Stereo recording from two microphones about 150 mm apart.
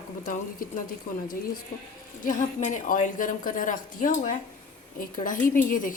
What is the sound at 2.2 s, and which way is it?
A woman's voice, 60° left (ahead or behind).